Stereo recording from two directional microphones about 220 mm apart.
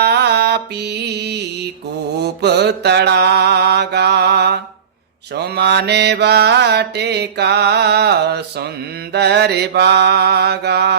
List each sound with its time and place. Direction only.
0.0 s music: 50° right (ahead or behind)
2.2 s mantra: 50° right (ahead or behind)